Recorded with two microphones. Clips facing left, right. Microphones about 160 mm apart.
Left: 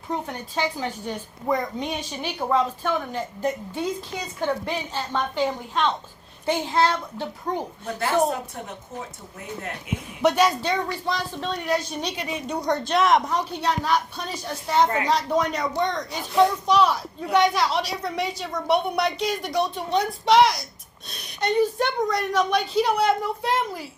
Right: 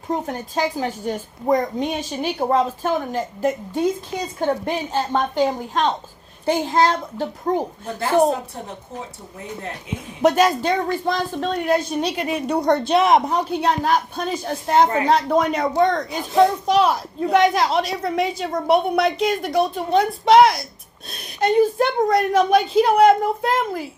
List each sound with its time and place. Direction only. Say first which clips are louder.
0.1 s a woman's voice: right 5 dB; 40° right (ahead or behind)
7.9 s speech: right 5 dB; 30° right (ahead or behind)
10.2 s a woman's voice: right 4 dB; 45° right (ahead or behind); by 13.1 s 65° right (ahead or behind)
13.6 s a woman's voice: right 3 dB; 50° right (ahead or behind)